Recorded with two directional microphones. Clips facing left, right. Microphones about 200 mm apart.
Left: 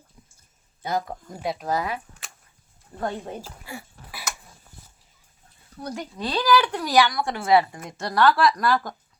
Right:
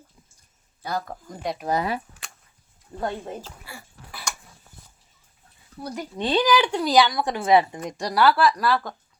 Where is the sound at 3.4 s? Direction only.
15° left (ahead or behind).